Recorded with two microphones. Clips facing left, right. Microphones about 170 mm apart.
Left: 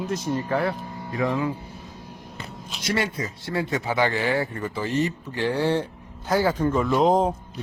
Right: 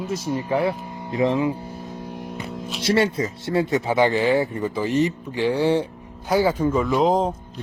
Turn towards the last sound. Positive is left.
turn(degrees=0)  # may be behind; listen again after turning